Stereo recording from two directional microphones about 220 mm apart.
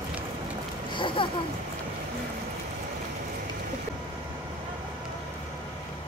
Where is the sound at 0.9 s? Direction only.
20° left (ahead or behind).